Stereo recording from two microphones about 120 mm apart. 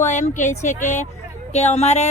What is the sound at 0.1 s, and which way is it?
Speech, 90° left.